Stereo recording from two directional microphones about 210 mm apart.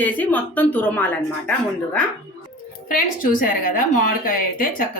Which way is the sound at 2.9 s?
40° left (ahead or behind).